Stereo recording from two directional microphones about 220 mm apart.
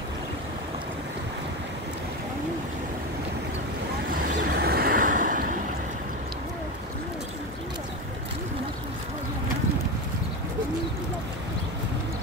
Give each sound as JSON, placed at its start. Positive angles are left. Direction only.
{"t": 4.6, "sound": "vehicle", "side_deg": -45}